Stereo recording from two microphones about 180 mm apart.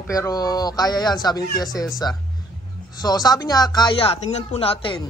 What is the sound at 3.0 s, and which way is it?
A man's voice, 20° left (ahead or behind).